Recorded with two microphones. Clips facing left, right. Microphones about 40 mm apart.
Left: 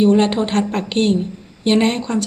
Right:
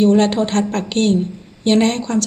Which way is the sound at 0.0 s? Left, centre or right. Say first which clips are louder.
Right 1 dB; centre.